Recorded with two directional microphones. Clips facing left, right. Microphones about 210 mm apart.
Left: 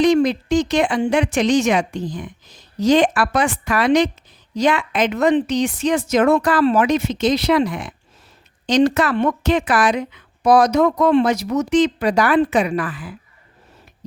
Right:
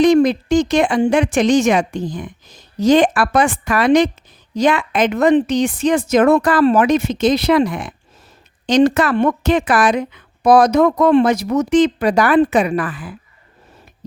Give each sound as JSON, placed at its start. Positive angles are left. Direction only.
{"t": 0.0, "sound": "speech", "side_deg": -50}